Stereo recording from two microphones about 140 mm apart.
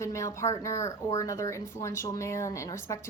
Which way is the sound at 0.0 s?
20° left (ahead or behind).